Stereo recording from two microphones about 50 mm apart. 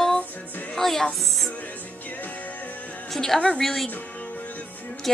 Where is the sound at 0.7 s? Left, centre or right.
Centre.